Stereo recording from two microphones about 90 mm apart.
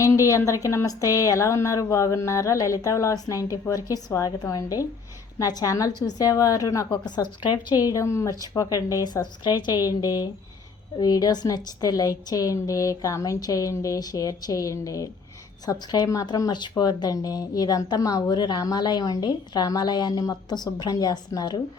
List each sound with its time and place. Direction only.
0.0 s a woman's voice: 35° left (ahead or behind)
6.9 s speech: 55° left (ahead or behind); by 9.2 s 40° left (ahead or behind)
9.4 s a woman's voice: 55° left (ahead or behind)